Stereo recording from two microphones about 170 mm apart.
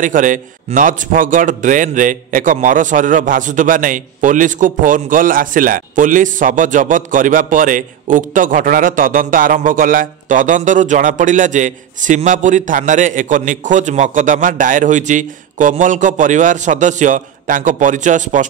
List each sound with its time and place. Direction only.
0.0 s a man's voice: 50° right (ahead or behind)